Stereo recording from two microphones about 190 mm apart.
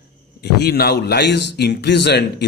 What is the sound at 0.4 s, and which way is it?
A man's voice, 55° left (ahead or behind).